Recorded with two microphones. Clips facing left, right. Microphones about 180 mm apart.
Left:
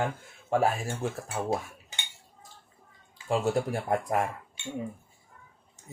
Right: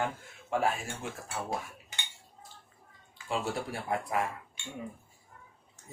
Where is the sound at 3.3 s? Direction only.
45° left (ahead or behind).